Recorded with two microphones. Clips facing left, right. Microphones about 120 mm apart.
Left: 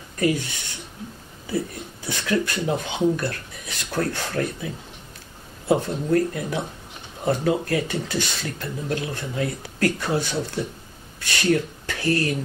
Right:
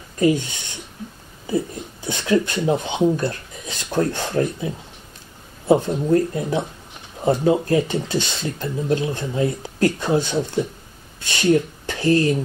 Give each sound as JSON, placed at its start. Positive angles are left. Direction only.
{"t": 0.2, "sound": "speech", "side_deg": -25}
{"t": 1.5, "sound": "speech", "side_deg": -20}